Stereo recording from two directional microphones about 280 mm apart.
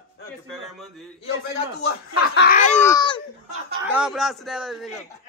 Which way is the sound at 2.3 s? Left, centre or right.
Left.